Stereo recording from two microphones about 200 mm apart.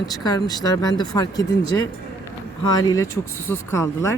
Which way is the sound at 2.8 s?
15° left (ahead or behind).